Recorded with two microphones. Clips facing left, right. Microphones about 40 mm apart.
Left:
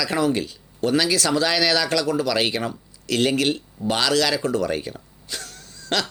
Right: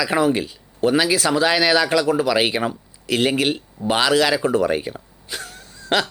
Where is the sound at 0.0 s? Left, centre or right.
Centre.